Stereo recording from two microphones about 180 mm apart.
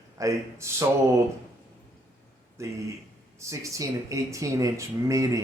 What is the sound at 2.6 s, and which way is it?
Speech, 15° right (ahead or behind).